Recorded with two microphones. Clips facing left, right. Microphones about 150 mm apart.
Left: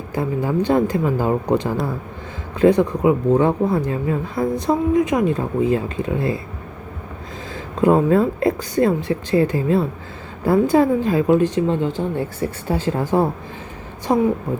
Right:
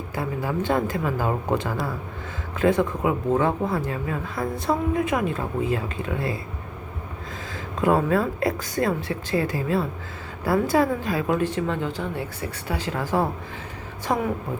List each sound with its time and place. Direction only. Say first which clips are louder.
0.1 s speech: left 7 dB; 20° left (ahead or behind)
7.5 s speech: left 5 dB; 20° left (ahead or behind)